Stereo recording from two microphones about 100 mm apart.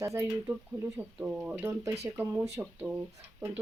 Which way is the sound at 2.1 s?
25° right (ahead or behind).